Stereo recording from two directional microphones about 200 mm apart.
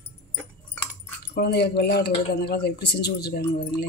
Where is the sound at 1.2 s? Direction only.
50° left (ahead or behind).